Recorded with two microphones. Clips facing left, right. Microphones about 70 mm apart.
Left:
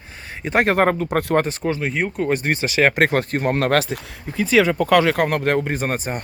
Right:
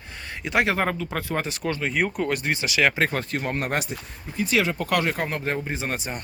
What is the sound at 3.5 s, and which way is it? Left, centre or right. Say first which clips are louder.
Speech: left 10 dB; left.